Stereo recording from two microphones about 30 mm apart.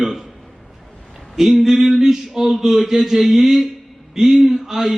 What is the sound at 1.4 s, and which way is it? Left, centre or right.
A man's voice, centre.